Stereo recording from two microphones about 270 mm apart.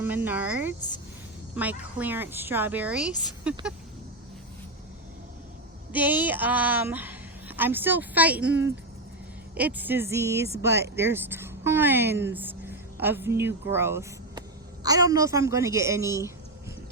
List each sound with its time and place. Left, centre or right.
0.0 s a woman's voice: centre
5.9 s a woman's voice: centre
9.6 s a woman's voice: centre